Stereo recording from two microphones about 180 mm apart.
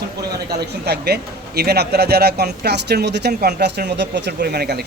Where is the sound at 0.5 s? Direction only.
65° right (ahead or behind).